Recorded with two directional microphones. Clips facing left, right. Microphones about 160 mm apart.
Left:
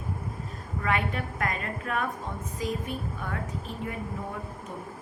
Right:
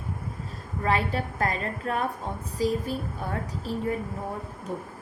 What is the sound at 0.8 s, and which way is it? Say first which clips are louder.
A woman's voice: right 3 dB; 30° right (ahead or behind).